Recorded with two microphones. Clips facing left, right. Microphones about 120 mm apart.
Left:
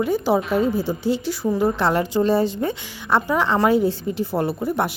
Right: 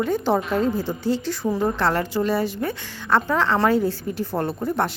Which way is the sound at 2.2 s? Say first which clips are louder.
Left 3 dB; 30° left (ahead or behind).